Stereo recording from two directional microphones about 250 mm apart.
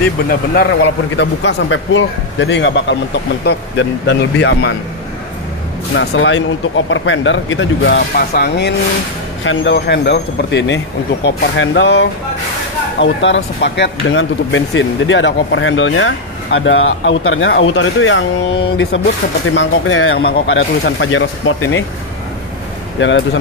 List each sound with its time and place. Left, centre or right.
0.3 s speech: left
5.9 s speech: left
19.5 s speech: left
22.9 s speech: left